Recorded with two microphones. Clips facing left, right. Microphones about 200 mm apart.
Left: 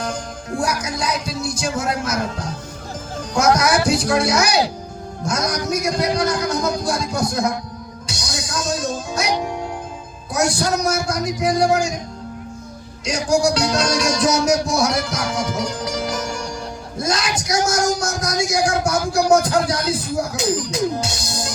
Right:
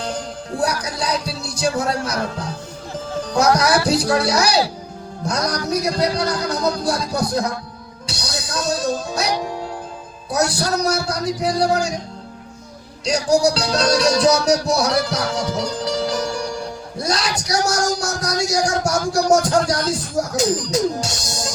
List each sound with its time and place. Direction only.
0.6 s speech: 35° right (ahead or behind)
3.3 s music: 35° right (ahead or behind)
8.7 s speech: 35° right (ahead or behind)
10.7 s music: 35° right (ahead or behind)
13.1 s music: 35° right (ahead or behind)
19.3 s speech: 45° right (ahead or behind)
20.7 s music: 40° right (ahead or behind)